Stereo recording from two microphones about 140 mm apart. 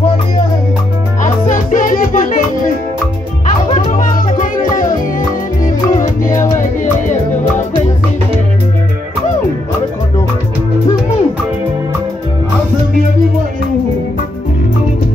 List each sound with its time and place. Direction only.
1.2 s music: 70° left (ahead or behind)